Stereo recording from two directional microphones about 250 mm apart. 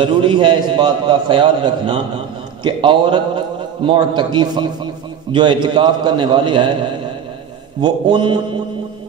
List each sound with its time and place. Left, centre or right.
0.0 s a man's voice: centre
7.8 s mantra: centre